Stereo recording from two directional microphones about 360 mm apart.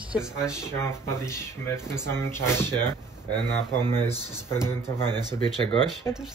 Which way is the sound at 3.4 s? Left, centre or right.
Centre.